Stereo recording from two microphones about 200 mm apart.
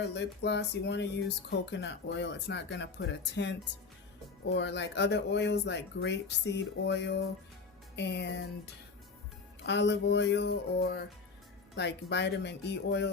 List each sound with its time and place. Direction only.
0.1 s speech: 60° left (ahead or behind)